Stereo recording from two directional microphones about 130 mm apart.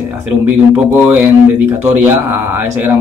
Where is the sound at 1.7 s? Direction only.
15° right (ahead or behind).